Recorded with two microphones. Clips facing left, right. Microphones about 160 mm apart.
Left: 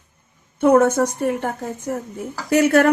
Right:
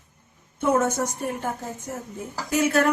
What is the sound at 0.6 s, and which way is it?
A woman's voice, 60° left (ahead or behind).